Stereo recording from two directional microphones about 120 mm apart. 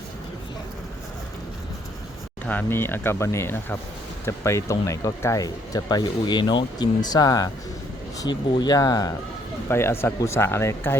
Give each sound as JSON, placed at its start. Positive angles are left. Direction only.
{"t": 2.5, "sound": "speech", "side_deg": 15}
{"t": 9.6, "sound": "speech", "side_deg": 20}